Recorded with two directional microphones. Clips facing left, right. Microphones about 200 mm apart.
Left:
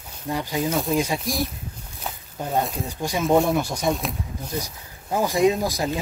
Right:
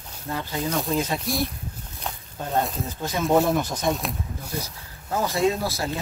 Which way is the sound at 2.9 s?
15° left (ahead or behind).